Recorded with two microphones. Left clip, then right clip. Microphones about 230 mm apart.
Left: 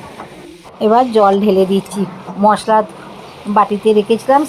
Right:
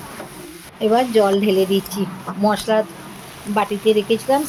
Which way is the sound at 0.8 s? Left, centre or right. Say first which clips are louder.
Left 5 dB; centre.